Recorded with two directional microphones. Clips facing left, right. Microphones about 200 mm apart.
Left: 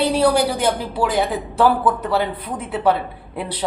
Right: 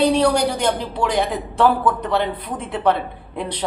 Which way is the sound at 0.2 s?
5° left (ahead or behind).